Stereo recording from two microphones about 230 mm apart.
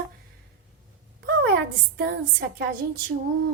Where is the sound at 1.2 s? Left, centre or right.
Right.